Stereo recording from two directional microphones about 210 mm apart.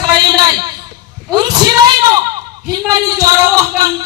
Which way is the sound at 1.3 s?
20° right (ahead or behind).